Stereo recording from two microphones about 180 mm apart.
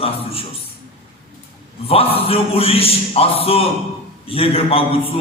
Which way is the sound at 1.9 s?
30° left (ahead or behind).